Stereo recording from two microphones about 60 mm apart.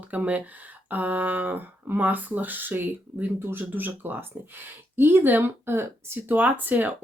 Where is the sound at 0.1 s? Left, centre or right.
Right.